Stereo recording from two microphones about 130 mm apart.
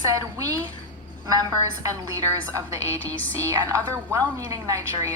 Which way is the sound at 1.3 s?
30° right (ahead or behind).